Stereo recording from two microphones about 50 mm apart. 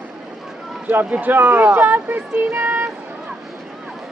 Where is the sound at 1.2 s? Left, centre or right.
Right.